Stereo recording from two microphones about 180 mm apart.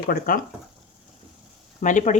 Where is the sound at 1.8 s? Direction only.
45° left (ahead or behind).